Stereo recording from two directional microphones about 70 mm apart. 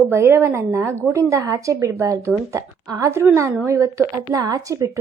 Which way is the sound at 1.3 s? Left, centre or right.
Right.